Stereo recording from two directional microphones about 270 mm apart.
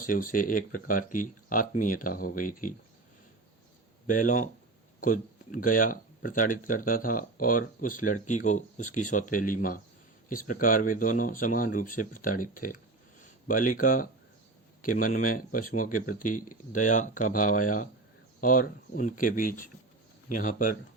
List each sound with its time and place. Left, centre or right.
0.0 s speech: left
4.0 s speech: left